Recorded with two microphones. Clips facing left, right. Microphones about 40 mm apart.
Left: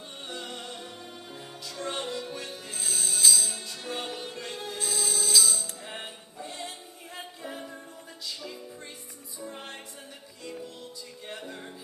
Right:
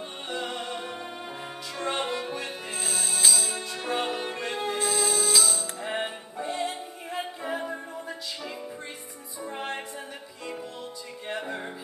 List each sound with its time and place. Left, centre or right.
0.3 s music: right
9.4 s music: right
11.2 s music: right